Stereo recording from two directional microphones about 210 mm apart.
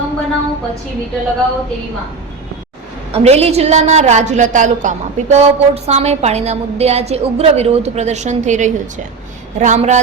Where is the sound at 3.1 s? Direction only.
30° right (ahead or behind).